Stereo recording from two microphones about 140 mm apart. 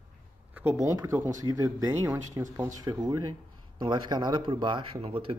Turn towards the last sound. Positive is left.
turn(degrees=-40)  # may be behind; listen again after turning